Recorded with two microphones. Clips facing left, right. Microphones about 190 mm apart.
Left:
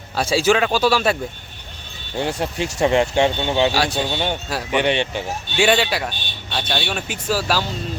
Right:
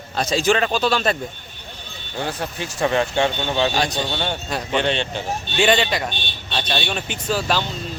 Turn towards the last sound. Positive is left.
turn(degrees=5)  # may be behind; listen again after turning